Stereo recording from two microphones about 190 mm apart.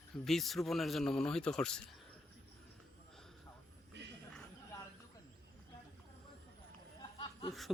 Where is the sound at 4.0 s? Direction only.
65° right (ahead or behind).